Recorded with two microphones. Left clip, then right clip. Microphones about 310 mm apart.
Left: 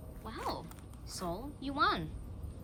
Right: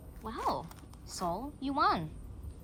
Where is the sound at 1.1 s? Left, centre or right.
Centre.